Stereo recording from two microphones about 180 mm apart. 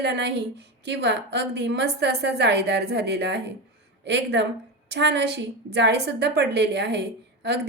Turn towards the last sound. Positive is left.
turn(degrees=-65)  # may be behind; listen again after turning